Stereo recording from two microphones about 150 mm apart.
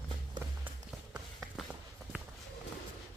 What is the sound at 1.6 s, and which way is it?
Walk, 5° right (ahead or behind).